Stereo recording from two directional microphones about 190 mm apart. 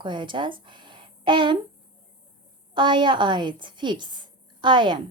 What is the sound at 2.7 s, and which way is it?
A woman's voice, 25° right (ahead or behind).